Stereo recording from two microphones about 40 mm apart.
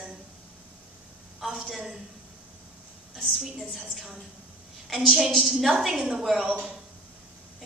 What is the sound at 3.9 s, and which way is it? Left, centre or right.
A woman's voice, centre.